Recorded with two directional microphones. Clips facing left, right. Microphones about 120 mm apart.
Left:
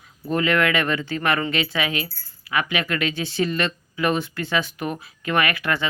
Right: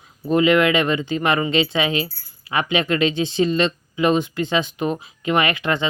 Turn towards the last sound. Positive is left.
turn(degrees=-20)  # may be behind; listen again after turning